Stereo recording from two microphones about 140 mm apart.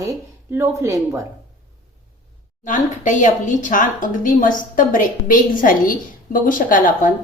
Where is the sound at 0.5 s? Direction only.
20° right (ahead or behind).